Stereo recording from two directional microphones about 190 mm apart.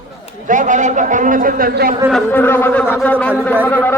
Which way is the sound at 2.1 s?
10° left (ahead or behind).